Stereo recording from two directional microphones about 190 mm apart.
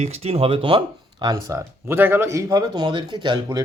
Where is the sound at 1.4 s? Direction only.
15° right (ahead or behind).